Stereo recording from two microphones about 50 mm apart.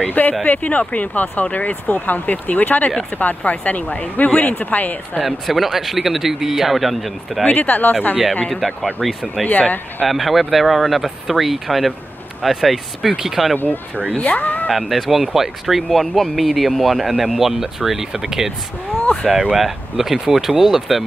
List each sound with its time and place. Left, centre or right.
0.1 s speech: left
5.2 s speech: centre
7.4 s speech: left
9.0 s speech: centre
9.5 s speech: left
10.0 s speech: centre
14.1 s speech: left
14.4 s speech: left
14.7 s speech: centre
19.5 s speech: centre